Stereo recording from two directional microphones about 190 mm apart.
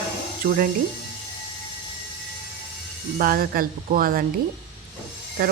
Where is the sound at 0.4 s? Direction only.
50° right (ahead or behind).